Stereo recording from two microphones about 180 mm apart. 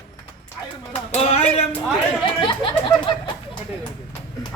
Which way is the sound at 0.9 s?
35° left (ahead or behind).